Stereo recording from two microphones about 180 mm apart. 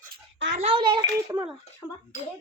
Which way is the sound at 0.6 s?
25° right (ahead or behind).